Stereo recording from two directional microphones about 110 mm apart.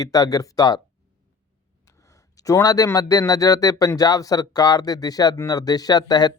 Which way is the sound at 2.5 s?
30° left (ahead or behind).